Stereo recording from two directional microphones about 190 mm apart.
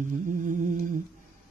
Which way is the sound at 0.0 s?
45° right (ahead or behind).